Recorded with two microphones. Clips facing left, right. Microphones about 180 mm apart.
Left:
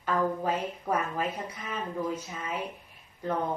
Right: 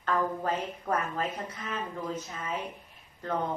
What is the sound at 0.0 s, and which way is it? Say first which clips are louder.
Speech: left 1 dB; 10° left (ahead or behind).